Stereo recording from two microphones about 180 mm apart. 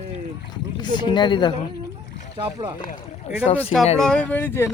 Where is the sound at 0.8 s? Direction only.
25° left (ahead or behind).